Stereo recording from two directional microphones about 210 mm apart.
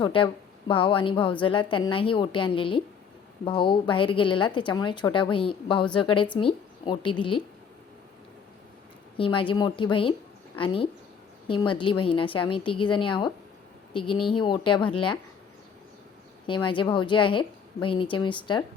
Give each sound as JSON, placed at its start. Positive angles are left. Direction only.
{"t": 0.0, "sound": "a woman's voice", "side_deg": 25}
{"t": 9.1, "sound": "a woman's voice", "side_deg": 25}
{"t": 16.6, "sound": "a woman's voice", "side_deg": 25}